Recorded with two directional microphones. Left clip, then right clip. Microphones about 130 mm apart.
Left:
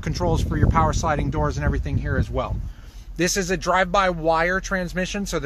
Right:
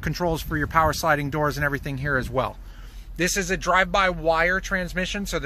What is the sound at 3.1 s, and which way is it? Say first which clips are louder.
Speech: left 1 dB; 40° left (ahead or behind).